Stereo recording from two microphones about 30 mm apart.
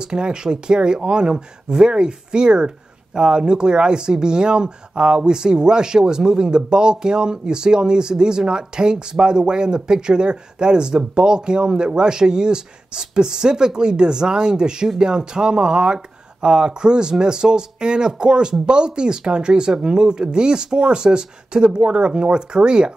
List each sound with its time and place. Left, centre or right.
0.0 s speech: right